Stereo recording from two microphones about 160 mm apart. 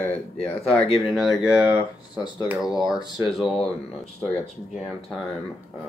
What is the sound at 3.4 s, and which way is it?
Speech, centre (ahead or behind).